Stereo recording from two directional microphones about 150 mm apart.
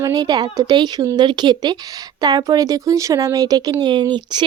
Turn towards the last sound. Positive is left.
turn(degrees=-30)  # may be behind; listen again after turning